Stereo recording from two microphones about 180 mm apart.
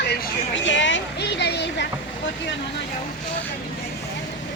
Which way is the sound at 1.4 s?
70° left (ahead or behind).